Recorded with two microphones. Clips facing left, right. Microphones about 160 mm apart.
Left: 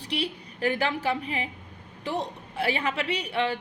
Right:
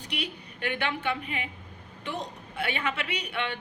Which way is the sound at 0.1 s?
35° left (ahead or behind).